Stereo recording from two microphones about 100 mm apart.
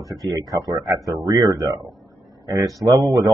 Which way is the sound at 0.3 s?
35° right (ahead or behind).